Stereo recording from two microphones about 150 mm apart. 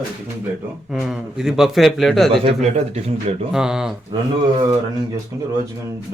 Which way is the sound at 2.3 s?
40° right (ahead or behind).